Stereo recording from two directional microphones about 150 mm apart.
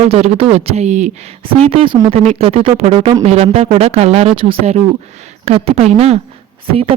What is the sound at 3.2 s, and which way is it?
Speech, 45° right (ahead or behind).